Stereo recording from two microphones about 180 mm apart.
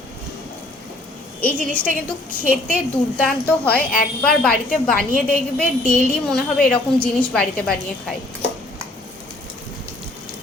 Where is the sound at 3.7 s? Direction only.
55° left (ahead or behind).